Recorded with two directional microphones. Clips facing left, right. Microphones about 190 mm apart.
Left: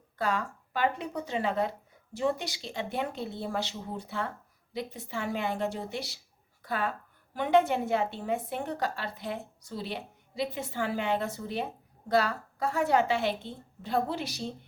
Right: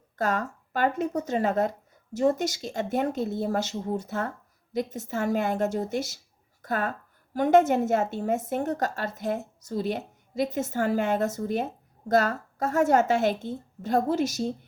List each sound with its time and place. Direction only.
0.2 s a woman's voice: 45° right (ahead or behind)